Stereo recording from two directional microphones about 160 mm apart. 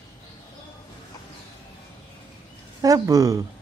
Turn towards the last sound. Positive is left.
turn(degrees=-20)  # may be behind; listen again after turning